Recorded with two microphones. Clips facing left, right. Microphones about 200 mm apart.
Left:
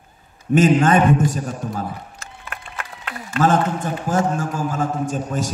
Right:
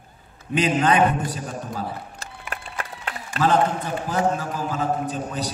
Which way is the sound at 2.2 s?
35° right (ahead or behind).